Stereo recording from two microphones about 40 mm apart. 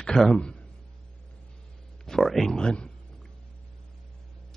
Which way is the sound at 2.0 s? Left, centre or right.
Centre.